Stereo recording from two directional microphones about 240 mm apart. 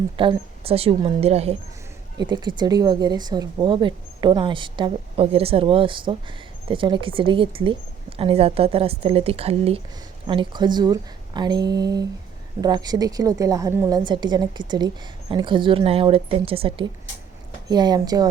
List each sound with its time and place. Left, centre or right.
0.2 s a woman's voice: right